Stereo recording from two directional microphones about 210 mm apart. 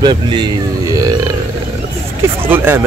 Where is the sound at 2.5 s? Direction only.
10° right (ahead or behind).